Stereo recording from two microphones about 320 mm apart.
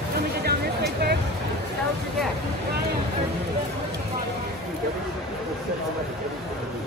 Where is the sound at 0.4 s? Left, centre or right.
Right.